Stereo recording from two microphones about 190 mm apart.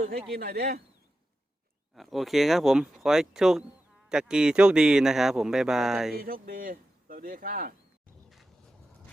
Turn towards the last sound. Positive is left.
turn(degrees=-50)  # may be behind; listen again after turning